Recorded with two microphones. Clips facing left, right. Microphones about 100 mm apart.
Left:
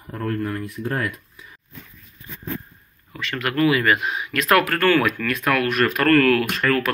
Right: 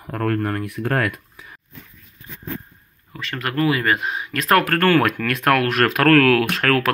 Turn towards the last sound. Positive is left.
turn(degrees=-85)